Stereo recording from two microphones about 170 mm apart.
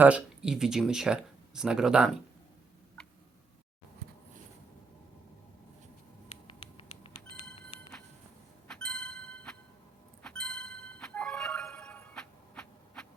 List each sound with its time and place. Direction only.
0.0 s speech: 5° right (ahead or behind)
6.2 s patter: 35° left (ahead or behind)
8.6 s a sound: 5° left (ahead or behind)
10.2 s music: 5° left (ahead or behind)